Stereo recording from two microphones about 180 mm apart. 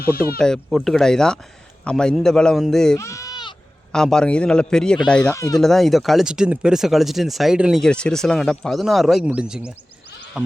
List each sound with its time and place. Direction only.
0.0 s speech: 55° left (ahead or behind)
0.3 s speech: 5° left (ahead or behind)
3.0 s bleat: 15° left (ahead or behind)
3.9 s speech: 5° left (ahead or behind)
5.2 s speech: 20° left (ahead or behind)
5.5 s speech: centre (ahead or behind)